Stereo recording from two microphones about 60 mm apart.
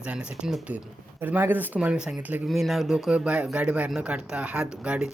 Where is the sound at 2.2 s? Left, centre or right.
Right.